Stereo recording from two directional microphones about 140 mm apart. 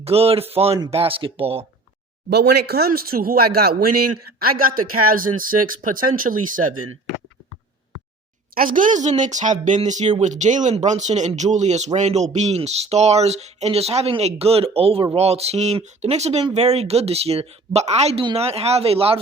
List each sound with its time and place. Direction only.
0.0 s speech: 45° right (ahead or behind)
2.4 s a man's voice: 90° right
8.5 s speech: 70° right (ahead or behind); by 19.2 s 45° right (ahead or behind)